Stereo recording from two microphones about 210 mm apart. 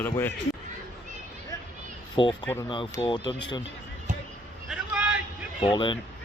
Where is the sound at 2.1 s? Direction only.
20° left (ahead or behind).